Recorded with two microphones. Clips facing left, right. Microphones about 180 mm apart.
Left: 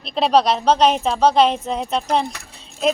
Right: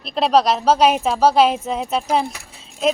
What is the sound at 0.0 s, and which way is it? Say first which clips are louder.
A woman's voice: even; centre (ahead or behind).